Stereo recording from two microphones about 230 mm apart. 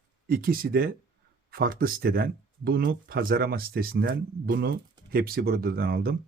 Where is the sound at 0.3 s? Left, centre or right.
Right.